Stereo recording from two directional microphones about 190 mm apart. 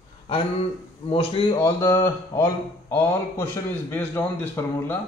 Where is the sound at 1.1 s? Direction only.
30° left (ahead or behind).